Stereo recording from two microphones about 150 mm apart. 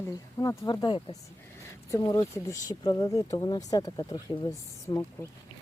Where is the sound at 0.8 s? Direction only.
30° left (ahead or behind).